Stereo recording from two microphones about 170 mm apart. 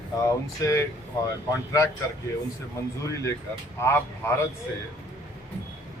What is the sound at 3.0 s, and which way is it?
A man's voice, 20° left (ahead or behind).